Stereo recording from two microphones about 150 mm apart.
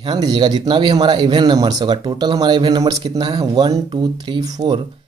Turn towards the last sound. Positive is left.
turn(degrees=-30)  # may be behind; listen again after turning